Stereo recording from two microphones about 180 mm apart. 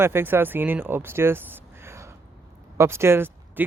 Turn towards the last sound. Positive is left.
turn(degrees=-10)  # may be behind; listen again after turning